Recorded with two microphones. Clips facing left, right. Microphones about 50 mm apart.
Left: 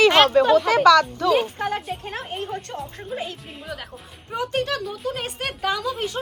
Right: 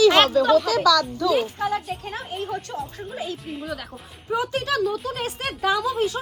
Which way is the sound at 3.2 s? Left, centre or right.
Centre.